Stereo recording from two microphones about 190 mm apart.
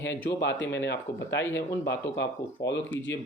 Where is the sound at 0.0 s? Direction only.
70° left (ahead or behind).